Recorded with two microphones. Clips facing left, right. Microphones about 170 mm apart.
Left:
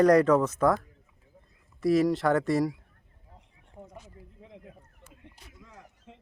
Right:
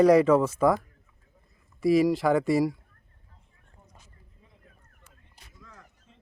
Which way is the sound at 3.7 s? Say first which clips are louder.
Left 13 dB; 80° left.